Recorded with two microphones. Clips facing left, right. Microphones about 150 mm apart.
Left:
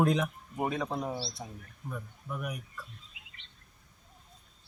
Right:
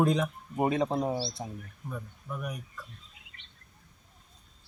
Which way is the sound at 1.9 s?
Centre (ahead or behind).